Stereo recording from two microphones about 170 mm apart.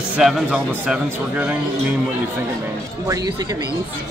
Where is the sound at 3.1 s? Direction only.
20° right (ahead or behind).